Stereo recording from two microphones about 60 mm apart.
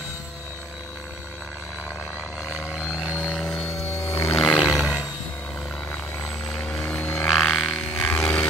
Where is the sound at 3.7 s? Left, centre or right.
Left.